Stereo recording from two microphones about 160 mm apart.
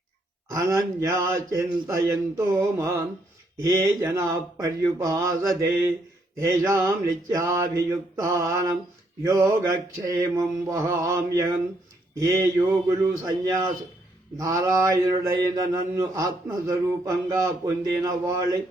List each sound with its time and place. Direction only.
0.5 s mantra: 20° right (ahead or behind)